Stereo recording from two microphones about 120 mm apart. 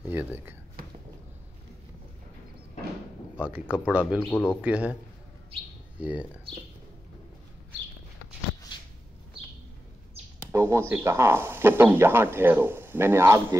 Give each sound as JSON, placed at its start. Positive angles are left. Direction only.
{"t": 0.1, "sound": "speech", "side_deg": -15}
{"t": 3.3, "sound": "speech", "side_deg": -10}
{"t": 4.3, "sound": "a man's voice", "side_deg": 15}
{"t": 4.6, "sound": "speech", "side_deg": -10}
{"t": 5.9, "sound": "speech", "side_deg": -10}
{"t": 8.7, "sound": "a sound", "side_deg": 40}
{"t": 10.5, "sound": "speech", "side_deg": -20}